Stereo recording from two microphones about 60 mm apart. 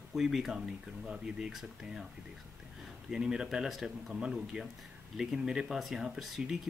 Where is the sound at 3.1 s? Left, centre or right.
Centre.